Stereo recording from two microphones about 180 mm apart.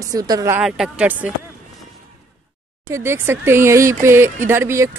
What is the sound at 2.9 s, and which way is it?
Speech, 15° right (ahead or behind).